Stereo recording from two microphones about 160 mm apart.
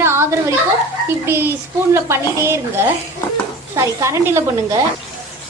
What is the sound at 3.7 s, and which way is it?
A woman's voice, 20° right (ahead or behind).